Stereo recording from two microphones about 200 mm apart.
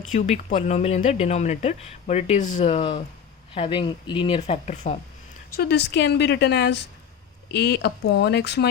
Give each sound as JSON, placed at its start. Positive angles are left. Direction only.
{"t": 0.1, "sound": "speech", "side_deg": 40}
{"t": 5.5, "sound": "a woman's voice", "side_deg": 55}